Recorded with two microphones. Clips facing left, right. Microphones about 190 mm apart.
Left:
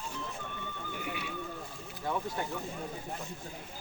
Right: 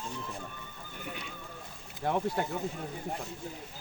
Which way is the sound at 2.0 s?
65° right (ahead or behind).